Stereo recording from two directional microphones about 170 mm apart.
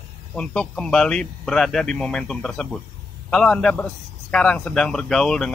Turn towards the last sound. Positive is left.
turn(degrees=5)  # may be behind; listen again after turning